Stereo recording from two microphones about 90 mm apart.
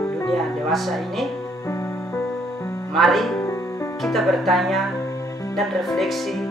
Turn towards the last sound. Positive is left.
turn(degrees=0)  # may be behind; listen again after turning